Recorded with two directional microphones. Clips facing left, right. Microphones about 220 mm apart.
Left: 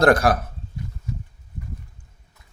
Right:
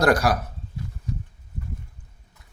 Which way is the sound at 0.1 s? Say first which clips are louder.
Left 3 dB; 55° left (ahead or behind).